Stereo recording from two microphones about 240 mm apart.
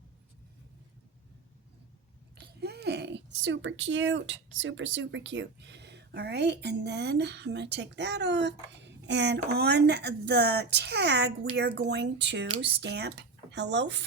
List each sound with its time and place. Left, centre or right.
2.6 s speech: right